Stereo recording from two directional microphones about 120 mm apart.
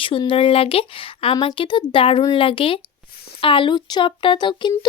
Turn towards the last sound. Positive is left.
turn(degrees=40)  # may be behind; listen again after turning